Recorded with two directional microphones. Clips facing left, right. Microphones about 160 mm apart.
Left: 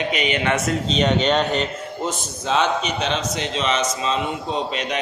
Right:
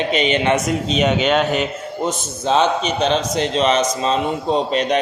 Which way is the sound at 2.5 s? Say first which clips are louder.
Right 4 dB; 30° right (ahead or behind).